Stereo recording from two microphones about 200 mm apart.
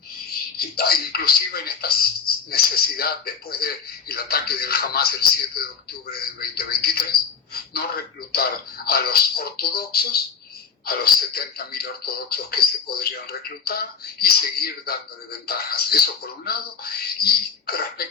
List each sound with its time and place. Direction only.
0.8 s speech: 50° left (ahead or behind)
8.3 s speech: 50° left (ahead or behind)